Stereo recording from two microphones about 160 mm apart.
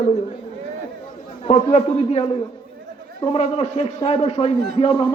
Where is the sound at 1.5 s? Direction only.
45° left (ahead or behind).